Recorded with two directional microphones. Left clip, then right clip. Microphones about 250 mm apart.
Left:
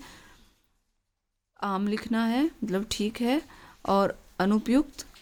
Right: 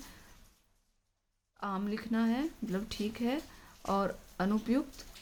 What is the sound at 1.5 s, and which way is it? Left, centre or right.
Speech, left.